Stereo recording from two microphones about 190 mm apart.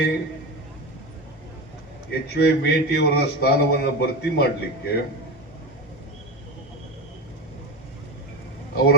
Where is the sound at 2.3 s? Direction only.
60° left (ahead or behind).